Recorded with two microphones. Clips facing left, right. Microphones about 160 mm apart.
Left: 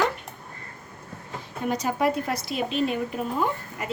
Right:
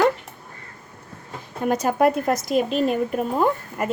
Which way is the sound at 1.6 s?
50° right (ahead or behind).